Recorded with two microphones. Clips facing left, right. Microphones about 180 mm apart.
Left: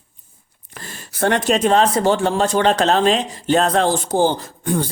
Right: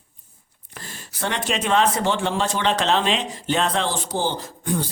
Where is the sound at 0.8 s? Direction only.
55° left (ahead or behind).